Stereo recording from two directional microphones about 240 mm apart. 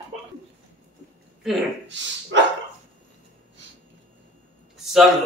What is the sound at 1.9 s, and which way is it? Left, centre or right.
Speech, right.